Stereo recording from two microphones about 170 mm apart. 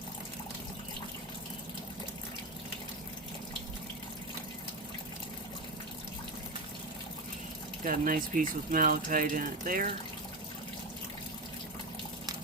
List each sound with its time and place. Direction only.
7.9 s speech: 55° right (ahead or behind)